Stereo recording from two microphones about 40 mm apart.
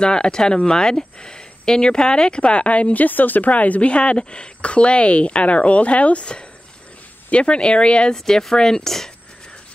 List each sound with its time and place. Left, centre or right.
0.0 s speech: left
3.9 s speech: left
8.1 s speech: centre